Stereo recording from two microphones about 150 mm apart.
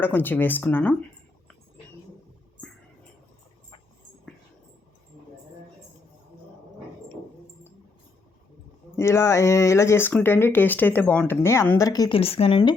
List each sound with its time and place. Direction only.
0.0 s speech: 15° left (ahead or behind)
9.0 s speech: 15° left (ahead or behind)
12.1 s a woman's voice: 40° left (ahead or behind)